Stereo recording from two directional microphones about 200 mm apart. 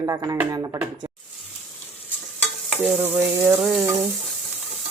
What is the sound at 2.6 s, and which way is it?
Stir, 5° right (ahead or behind).